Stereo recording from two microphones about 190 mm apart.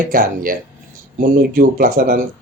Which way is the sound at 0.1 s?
50° right (ahead or behind).